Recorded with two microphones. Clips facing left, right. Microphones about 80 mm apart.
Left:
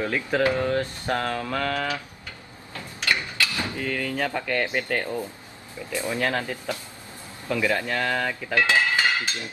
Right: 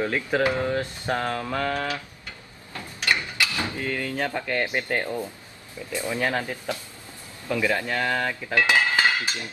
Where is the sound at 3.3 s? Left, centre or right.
Right.